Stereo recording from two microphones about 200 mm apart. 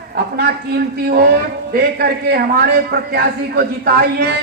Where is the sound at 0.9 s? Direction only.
50° right (ahead or behind).